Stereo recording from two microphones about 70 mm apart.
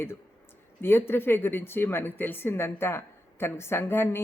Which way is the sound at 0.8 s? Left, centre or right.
Left.